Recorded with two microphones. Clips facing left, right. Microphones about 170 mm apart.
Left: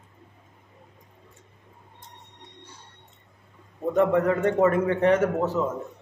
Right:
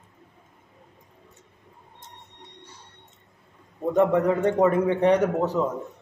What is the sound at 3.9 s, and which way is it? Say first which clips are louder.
A man's voice: right 1 dB; 20° right (ahead or behind).